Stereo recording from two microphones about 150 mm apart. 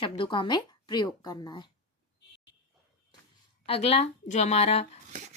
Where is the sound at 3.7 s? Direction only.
40° left (ahead or behind).